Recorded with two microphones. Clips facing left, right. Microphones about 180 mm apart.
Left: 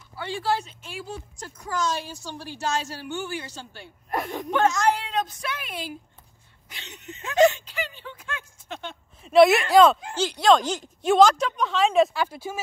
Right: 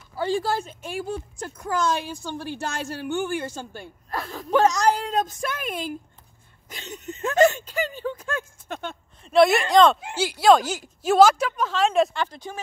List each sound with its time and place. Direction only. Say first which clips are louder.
0.1 s speech: right 3 dB; 40° right (ahead or behind)
4.1 s speech: left 3 dB; 20° left (ahead or behind)
4.5 s speech: right 3 dB; 35° right (ahead or behind)
9.2 s a woman's voice: left 2 dB; centre (ahead or behind)
10.1 s a woman's voice: right 2 dB; 10° right (ahead or behind); by 12.5 s 10° left (ahead or behind)